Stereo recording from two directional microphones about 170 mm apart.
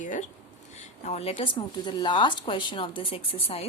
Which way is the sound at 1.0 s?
40° left (ahead or behind).